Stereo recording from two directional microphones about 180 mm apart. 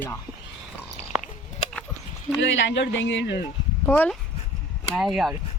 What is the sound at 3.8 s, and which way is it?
A woman's voice, 10° left (ahead or behind).